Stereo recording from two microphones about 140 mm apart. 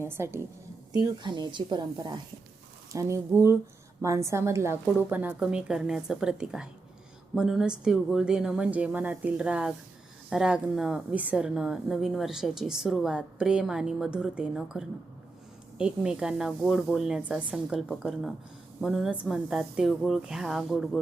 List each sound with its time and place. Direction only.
0.0 s a woman's voice: 15° right (ahead or behind)
1.0 s speech: 30° right (ahead or behind)
2.9 s a woman's voice: 20° right (ahead or behind); by 21.0 s centre (ahead or behind)